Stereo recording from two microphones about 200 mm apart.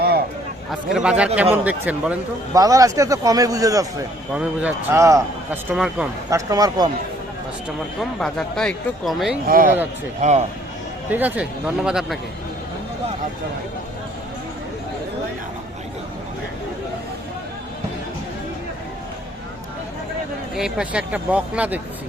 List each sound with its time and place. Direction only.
0.7 s speech: 5° right (ahead or behind)
5.7 s speech: 5° right (ahead or behind)
6.3 s speech: 20° right (ahead or behind)
8.2 s speech: centre (ahead or behind)
9.5 s a man's voice: 45° right (ahead or behind)
11.1 s speech: 10° right (ahead or behind)
20.6 s speech: 5° right (ahead or behind)